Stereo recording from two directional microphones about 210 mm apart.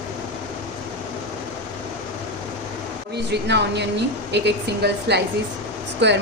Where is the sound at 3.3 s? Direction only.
55° right (ahead or behind).